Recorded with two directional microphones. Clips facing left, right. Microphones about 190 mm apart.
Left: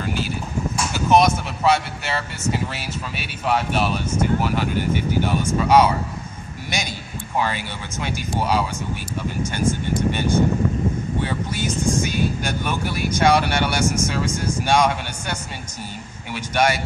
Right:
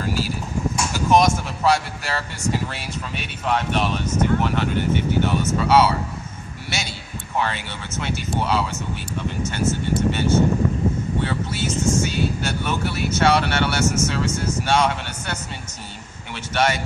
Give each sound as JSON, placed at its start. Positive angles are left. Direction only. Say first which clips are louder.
{"t": 0.9, "sound": "speech", "louder": "left 1 dB", "side_deg": 0}
{"t": 16.3, "sound": "speech", "louder": "left 1 dB", "side_deg": 10}